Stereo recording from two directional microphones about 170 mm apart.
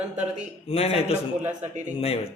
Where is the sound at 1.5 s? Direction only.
45° right (ahead or behind).